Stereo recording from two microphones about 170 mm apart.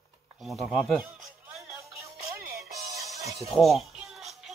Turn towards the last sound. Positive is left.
turn(degrees=0)  # may be behind; listen again after turning